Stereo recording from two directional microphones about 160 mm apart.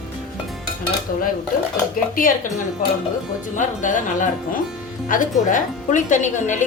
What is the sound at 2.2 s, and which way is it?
Speech, 60° left (ahead or behind).